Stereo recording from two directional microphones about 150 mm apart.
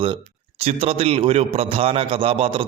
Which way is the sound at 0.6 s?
40° right (ahead or behind).